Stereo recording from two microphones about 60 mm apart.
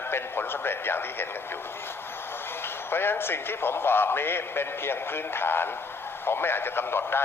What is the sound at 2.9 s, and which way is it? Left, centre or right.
A man's voice, left.